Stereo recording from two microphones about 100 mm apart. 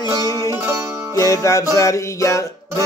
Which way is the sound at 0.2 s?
35° left (ahead or behind).